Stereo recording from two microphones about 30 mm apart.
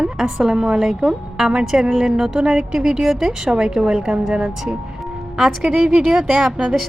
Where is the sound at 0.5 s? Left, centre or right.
Right.